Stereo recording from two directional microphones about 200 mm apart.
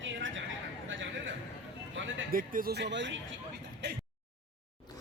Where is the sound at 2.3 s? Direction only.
45° right (ahead or behind); by 3.1 s 60° right (ahead or behind).